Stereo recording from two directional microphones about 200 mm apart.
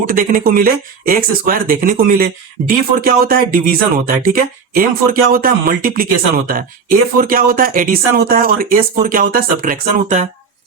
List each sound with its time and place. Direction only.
0.1 s speech: 45° right (ahead or behind)